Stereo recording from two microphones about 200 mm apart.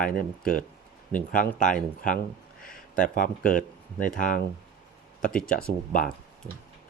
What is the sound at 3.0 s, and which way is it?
Speech, 40° left (ahead or behind).